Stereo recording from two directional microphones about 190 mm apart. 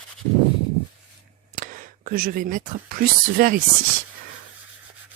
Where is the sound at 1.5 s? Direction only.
45° right (ahead or behind).